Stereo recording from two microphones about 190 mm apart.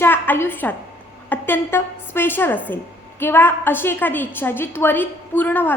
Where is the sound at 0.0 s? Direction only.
10° left (ahead or behind).